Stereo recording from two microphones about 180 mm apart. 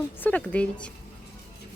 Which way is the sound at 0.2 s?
10° left (ahead or behind).